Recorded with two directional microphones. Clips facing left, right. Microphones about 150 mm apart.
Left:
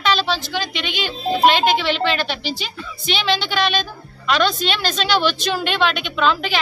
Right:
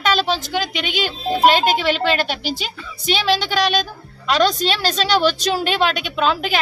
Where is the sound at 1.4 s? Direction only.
45° right (ahead or behind).